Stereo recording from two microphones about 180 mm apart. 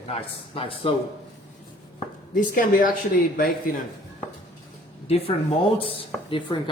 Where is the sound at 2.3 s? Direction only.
50° left (ahead or behind).